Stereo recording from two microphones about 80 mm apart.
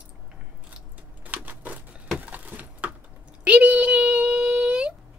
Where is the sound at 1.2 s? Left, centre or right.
Right.